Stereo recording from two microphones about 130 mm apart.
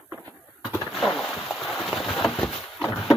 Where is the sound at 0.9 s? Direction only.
Centre (ahead or behind).